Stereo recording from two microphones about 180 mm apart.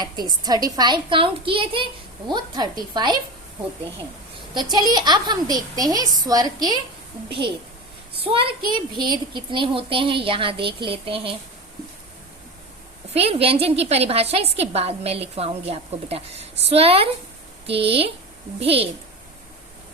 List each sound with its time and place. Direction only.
0.0 s a woman's voice: 25° right (ahead or behind)
4.5 s a woman's voice: 25° right (ahead or behind)
8.2 s a woman's voice: 30° right (ahead or behind)
13.1 s a woman's voice: 35° right (ahead or behind)